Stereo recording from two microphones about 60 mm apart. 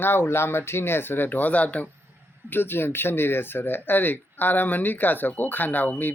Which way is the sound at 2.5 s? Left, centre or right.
Left.